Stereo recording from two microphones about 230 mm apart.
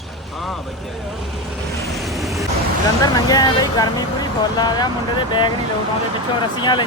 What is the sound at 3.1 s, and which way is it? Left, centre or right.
Speech, centre.